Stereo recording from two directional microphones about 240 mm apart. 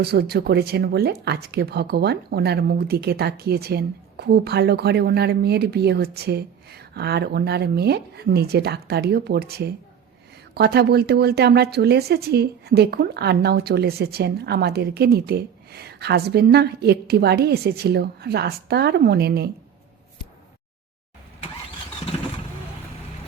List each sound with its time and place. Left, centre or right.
0.0 s a woman's voice: right